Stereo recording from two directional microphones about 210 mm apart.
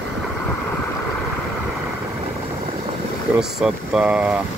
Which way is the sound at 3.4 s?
Centre (ahead or behind).